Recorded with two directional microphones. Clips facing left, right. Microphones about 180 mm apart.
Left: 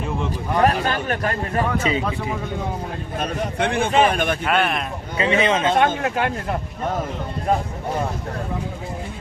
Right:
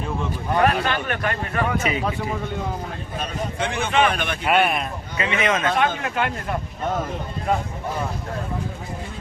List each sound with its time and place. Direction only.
0.6 s a man's voice: 35° left (ahead or behind)
3.2 s speech: 60° left (ahead or behind)
4.1 s a man's voice: 45° left (ahead or behind)
4.4 s speech: 10° right (ahead or behind)
5.1 s a man's voice: 30° left (ahead or behind)